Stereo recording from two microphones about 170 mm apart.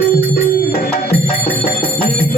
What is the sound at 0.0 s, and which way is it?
Music, 65° left (ahead or behind).